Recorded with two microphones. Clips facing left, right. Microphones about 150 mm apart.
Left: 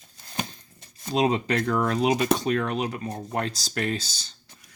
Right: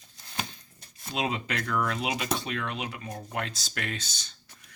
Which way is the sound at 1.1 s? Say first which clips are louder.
Left 8 dB; 35° left (ahead or behind).